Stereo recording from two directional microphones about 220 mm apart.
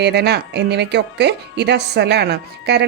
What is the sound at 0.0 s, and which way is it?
A woman's voice, 50° right (ahead or behind).